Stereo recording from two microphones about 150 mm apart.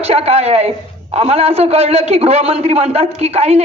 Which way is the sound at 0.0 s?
45° right (ahead or behind).